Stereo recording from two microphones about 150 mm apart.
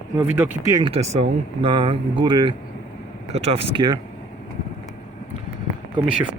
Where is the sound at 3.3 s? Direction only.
45° right (ahead or behind).